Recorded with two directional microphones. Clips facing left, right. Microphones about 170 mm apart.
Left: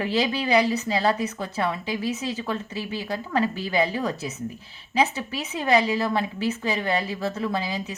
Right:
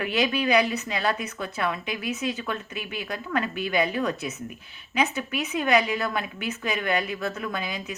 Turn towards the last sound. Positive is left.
turn(degrees=30)  # may be behind; listen again after turning